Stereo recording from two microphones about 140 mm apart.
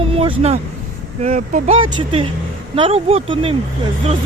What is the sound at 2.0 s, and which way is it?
Speech, 35° right (ahead or behind).